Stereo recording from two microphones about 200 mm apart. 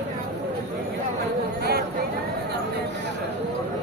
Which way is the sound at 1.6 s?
50° right (ahead or behind).